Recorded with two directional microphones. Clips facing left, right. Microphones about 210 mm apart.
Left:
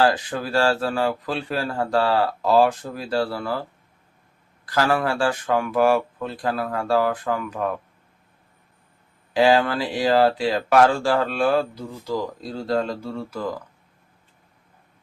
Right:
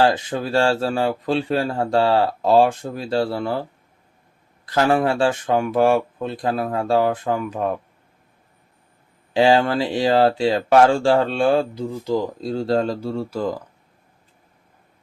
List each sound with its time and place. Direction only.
0.0 s speech: 25° right (ahead or behind)
9.3 s speech: 25° right (ahead or behind)